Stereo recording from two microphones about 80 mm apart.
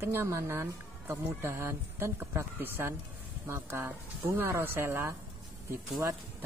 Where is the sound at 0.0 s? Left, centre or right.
Right.